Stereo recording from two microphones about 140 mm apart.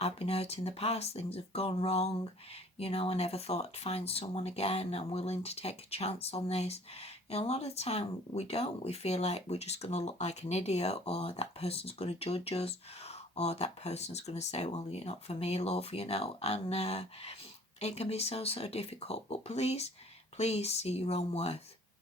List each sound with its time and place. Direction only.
0.0 s speech: 45° left (ahead or behind)